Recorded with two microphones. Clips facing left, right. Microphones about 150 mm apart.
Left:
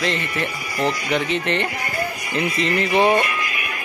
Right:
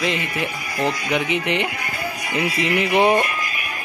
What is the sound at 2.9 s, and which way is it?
Speech, 15° right (ahead or behind).